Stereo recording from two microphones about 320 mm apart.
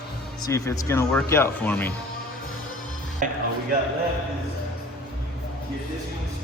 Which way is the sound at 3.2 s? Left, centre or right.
Right.